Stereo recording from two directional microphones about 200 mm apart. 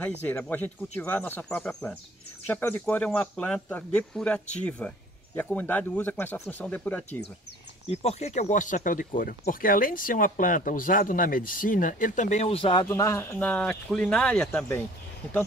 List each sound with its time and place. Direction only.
0.0 s speech: 5° left (ahead or behind)
7.9 s speech: 30° left (ahead or behind)
12.8 s speech: 15° left (ahead or behind)